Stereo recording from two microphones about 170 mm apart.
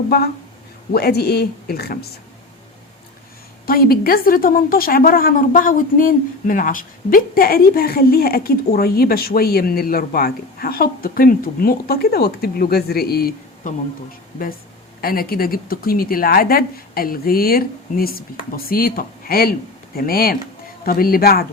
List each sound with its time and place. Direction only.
0.9 s speech: 70° left (ahead or behind)
3.7 s a woman's voice: 60° left (ahead or behind)
15.0 s a woman's voice: 60° left (ahead or behind)